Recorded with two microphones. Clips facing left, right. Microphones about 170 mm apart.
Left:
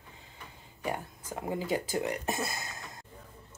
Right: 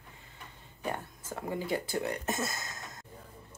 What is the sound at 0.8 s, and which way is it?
Speech, 15° left (ahead or behind).